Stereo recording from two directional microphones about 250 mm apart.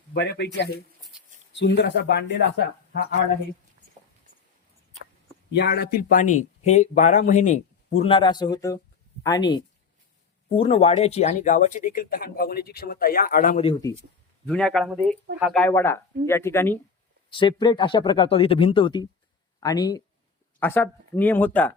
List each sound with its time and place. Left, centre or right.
0.1 s speech: left
5.5 s speech: left
14.4 s speech: centre